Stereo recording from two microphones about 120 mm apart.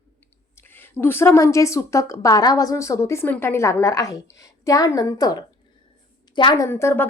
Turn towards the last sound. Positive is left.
turn(degrees=20)  # may be behind; listen again after turning